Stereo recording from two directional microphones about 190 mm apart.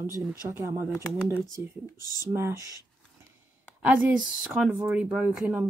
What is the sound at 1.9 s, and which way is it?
Speech, 20° left (ahead or behind).